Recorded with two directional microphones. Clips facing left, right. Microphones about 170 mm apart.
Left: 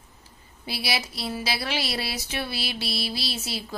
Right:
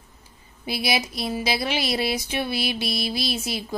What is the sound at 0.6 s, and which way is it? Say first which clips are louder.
A woman's voice: right 5 dB; 15° right (ahead or behind).